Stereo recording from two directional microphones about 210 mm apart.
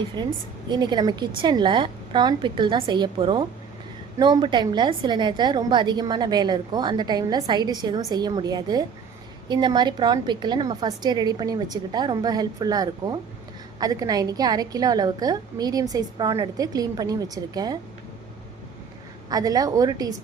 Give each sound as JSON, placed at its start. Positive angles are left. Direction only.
{"t": 0.2, "sound": "a woman's voice", "side_deg": -20}
{"t": 19.3, "sound": "a woman's voice", "side_deg": -15}